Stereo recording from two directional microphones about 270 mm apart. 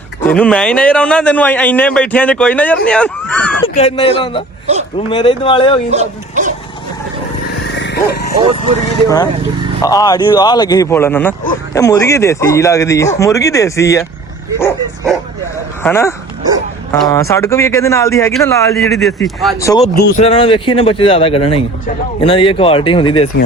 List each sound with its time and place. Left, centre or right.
0.3 s a man's voice: centre
3.8 s a man's voice: left
4.6 s speech: right
5.0 s a man's voice: centre
5.9 s speech: right
7.8 s a sound: left
9.0 s speech: centre
14.6 s bow-wow: centre
15.8 s a man's voice: centre
19.5 s a man's voice: centre